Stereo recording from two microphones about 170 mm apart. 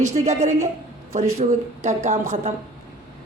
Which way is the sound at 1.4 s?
45° right (ahead or behind).